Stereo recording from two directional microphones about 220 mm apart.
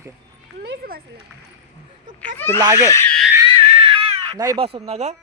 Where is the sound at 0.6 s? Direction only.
45° right (ahead or behind).